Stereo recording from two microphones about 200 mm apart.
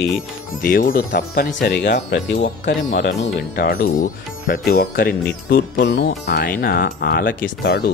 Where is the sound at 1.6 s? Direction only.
60° left (ahead or behind).